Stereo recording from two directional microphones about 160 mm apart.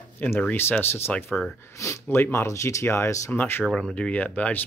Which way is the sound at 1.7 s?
20° left (ahead or behind).